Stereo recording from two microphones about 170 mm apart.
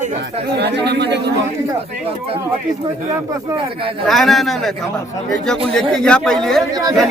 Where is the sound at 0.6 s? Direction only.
80° right.